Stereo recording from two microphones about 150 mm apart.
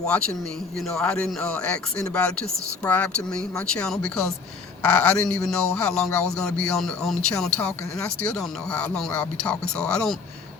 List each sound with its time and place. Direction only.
0.0 s speech: 5° left (ahead or behind)